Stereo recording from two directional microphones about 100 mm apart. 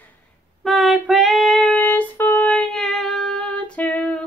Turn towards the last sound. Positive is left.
turn(degrees=15)  # may be behind; listen again after turning